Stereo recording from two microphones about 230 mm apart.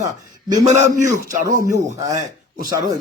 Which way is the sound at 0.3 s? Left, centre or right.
Centre.